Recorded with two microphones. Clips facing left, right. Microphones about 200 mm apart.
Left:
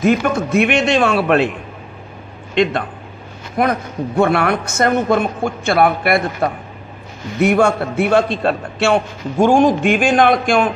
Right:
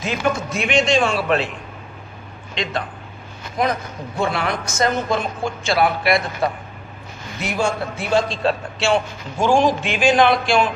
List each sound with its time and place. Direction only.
0.0 s a man's voice: 55° left (ahead or behind)
2.5 s a man's voice: 55° left (ahead or behind)